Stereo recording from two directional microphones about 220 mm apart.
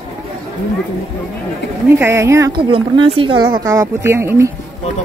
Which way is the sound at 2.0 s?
10° right (ahead or behind).